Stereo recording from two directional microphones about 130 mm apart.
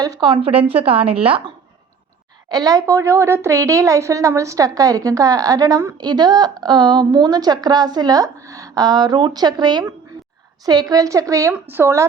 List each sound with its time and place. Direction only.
0.0 s a woman's voice: 30° right (ahead or behind)
2.5 s a woman's voice: 30° right (ahead or behind)